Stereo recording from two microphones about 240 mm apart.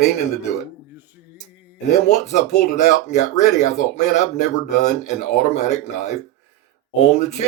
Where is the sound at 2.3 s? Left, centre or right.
Left.